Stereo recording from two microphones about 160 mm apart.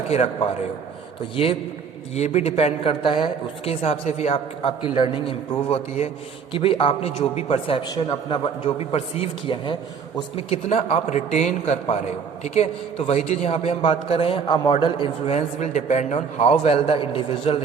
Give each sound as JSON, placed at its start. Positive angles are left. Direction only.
{"t": 0.1, "sound": "a man's voice", "side_deg": 40}
{"t": 2.1, "sound": "a man's voice", "side_deg": 45}